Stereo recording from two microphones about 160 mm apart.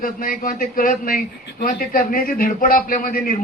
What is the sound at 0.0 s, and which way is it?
A man's voice, 60° left (ahead or behind).